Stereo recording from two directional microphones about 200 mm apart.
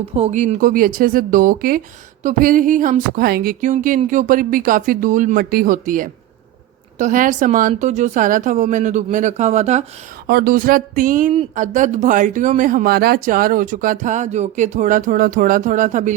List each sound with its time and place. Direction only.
0.0 s speech: 30° right (ahead or behind)
10.2 s speech: 50° right (ahead or behind)